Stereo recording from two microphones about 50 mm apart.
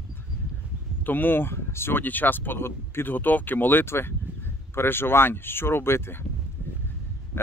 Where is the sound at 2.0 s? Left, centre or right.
Left.